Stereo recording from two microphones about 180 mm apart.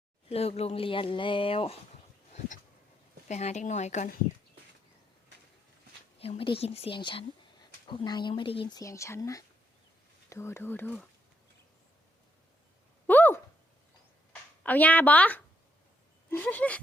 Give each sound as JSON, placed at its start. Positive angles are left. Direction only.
{"t": 0.3, "sound": "speech", "side_deg": 35}
{"t": 3.2, "sound": "speech", "side_deg": 40}
{"t": 6.1, "sound": "speech", "side_deg": 35}
{"t": 13.1, "sound": "a sound", "side_deg": 10}
{"t": 14.6, "sound": "speech", "side_deg": 10}